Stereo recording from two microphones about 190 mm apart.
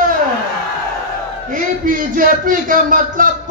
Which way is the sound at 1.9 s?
45° right (ahead or behind).